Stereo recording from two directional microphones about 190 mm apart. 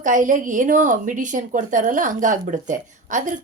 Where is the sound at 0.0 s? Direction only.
45° right (ahead or behind).